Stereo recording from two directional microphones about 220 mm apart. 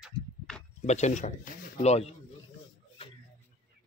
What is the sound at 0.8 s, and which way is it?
Speech, 30° left (ahead or behind).